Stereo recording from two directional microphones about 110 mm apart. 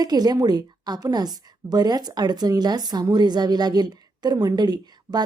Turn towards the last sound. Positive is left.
turn(degrees=-40)  # may be behind; listen again after turning